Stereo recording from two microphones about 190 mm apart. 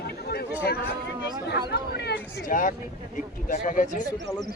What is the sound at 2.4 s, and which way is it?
Speech, 45° left (ahead or behind).